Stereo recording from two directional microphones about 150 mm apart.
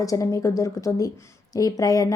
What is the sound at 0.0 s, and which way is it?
A woman's voice, 20° left (ahead or behind).